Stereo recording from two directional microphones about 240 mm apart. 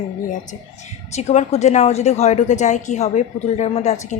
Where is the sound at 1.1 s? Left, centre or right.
Left.